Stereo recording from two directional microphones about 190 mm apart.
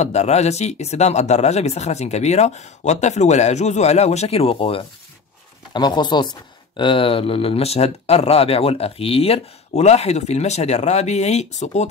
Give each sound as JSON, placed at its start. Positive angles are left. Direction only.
{"t": 0.0, "sound": "speech", "side_deg": 35}